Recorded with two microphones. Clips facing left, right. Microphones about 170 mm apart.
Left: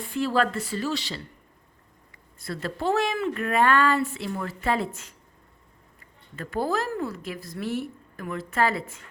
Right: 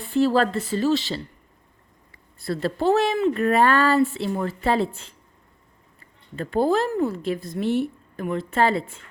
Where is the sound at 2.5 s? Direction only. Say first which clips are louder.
Right 6 dB; 30° right (ahead or behind).